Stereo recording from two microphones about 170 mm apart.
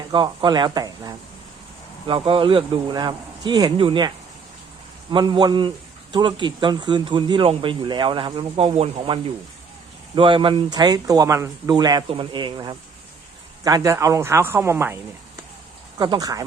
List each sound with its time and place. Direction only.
0.1 s speech: 25° right (ahead or behind)
5.1 s speech: 25° right (ahead or behind)
16.0 s speech: 25° right (ahead or behind)